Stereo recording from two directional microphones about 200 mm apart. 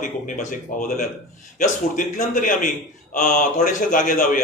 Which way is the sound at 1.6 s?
40° left (ahead or behind).